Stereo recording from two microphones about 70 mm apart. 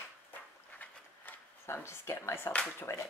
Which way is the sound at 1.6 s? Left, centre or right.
Left.